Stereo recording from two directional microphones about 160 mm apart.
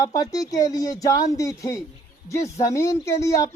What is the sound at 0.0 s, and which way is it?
Speech, 20° left (ahead or behind).